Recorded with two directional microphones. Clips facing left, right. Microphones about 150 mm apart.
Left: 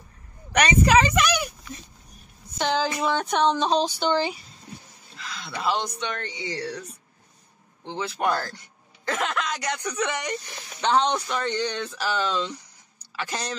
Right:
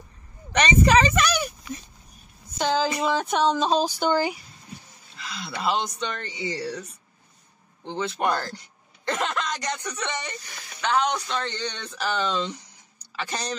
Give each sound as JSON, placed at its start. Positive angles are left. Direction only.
{"t": 0.5, "sound": "speech", "side_deg": 10}
{"t": 2.9, "sound": "speech", "side_deg": 0}
{"t": 7.8, "sound": "speech", "side_deg": 5}
{"t": 10.8, "sound": "speech", "side_deg": 30}
{"t": 11.1, "sound": "speech", "side_deg": 10}